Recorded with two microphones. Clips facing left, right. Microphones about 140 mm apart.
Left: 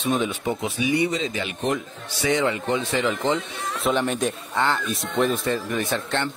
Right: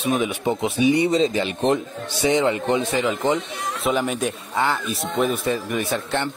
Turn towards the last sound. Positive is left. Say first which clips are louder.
# right 1 dB
turn(degrees=-10)  # may be behind; listen again after turning